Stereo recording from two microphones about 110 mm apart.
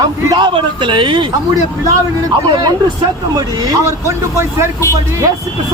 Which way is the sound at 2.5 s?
40° right (ahead or behind).